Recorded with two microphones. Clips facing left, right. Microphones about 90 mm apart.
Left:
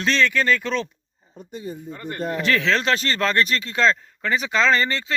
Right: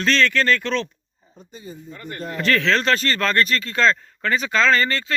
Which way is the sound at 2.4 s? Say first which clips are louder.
Right 2 dB; 10° left (ahead or behind).